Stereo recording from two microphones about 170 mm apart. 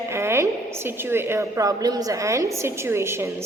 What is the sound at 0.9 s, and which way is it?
A woman's voice, 15° right (ahead or behind).